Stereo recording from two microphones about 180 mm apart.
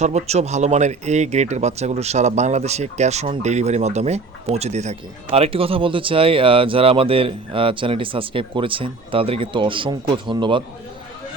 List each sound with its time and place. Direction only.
0.0 s speech: 40° right (ahead or behind)